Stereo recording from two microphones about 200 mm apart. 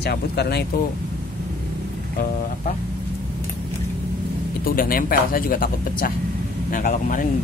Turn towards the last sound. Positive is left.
turn(degrees=40)  # may be behind; listen again after turning